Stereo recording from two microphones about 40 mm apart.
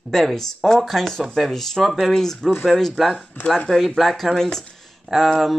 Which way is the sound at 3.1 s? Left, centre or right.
Left.